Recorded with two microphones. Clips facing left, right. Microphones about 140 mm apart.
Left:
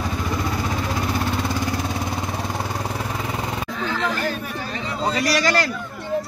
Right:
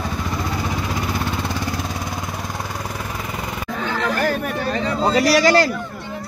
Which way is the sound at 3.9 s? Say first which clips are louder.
Right 4 dB; 50° right (ahead or behind).